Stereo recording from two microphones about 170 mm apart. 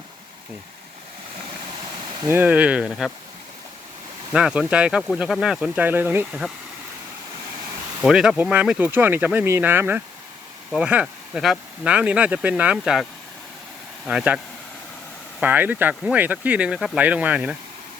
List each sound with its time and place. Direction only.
2.2 s speech: 10° right (ahead or behind)
4.3 s speech: 5° right (ahead or behind)
8.0 s speech: 5° right (ahead or behind)
14.1 s speech: 5° right (ahead or behind)